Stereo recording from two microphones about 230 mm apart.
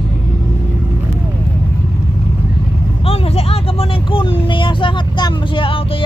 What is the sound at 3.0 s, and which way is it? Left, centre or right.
Vehicle, left.